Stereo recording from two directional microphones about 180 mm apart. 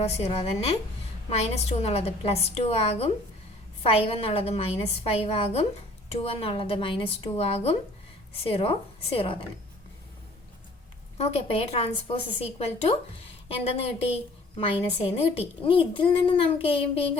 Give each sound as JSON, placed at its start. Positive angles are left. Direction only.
{"t": 0.0, "sound": "a woman's voice", "side_deg": 35}
{"t": 11.2, "sound": "a woman's voice", "side_deg": 35}